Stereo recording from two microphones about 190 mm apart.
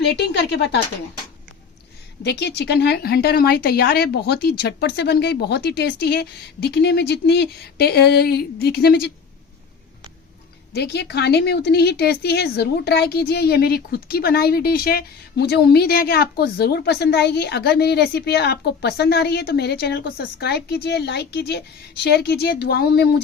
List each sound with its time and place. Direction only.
0.0 s speech: 65° left (ahead or behind)
2.2 s speech: 60° left (ahead or behind)
10.8 s speech: 60° left (ahead or behind)